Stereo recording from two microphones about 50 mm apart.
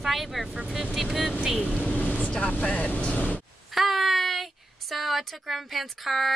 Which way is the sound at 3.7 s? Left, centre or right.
Centre.